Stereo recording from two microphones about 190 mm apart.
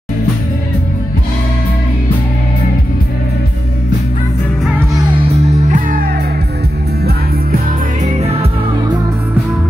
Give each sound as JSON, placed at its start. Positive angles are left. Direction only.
{"t": 5.3, "sound": "music", "side_deg": -40}
{"t": 8.1, "sound": "music", "side_deg": -35}